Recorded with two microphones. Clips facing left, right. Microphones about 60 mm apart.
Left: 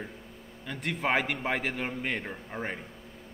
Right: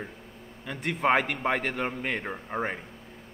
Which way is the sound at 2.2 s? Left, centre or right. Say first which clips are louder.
Right 5 dB; right.